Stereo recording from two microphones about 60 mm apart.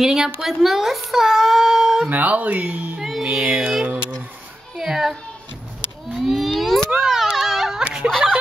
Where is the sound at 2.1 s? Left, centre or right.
Right.